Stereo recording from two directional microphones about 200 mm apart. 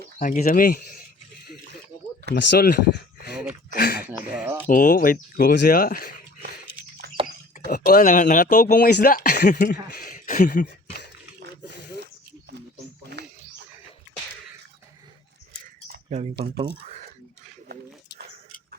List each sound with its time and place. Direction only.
0.2 s speech: 40° left (ahead or behind)
2.3 s speech: 50° left (ahead or behind)
3.8 s a sound: 50° left (ahead or behind)
4.2 s speech: 5° right (ahead or behind)
4.7 s speech: 40° left (ahead or behind)
7.0 s dog: 55° right (ahead or behind)
7.7 s speech: 45° left (ahead or behind)
13.2 s a sound: 55° right (ahead or behind)
15.9 s a sound: 35° right (ahead or behind)